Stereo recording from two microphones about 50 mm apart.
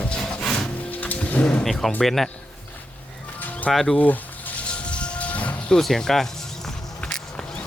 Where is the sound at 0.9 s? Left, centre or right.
Left.